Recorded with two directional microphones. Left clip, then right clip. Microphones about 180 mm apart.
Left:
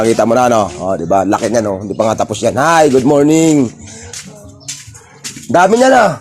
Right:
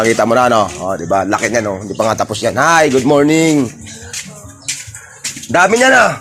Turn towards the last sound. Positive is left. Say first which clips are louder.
# left 1 dB
turn(degrees=30)  # may be behind; listen again after turning